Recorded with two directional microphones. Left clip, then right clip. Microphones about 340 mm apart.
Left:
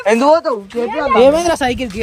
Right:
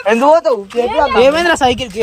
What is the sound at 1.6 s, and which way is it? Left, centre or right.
Speech, centre.